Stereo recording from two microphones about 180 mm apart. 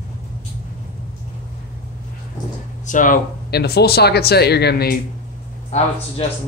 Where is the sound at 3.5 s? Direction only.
65° left (ahead or behind).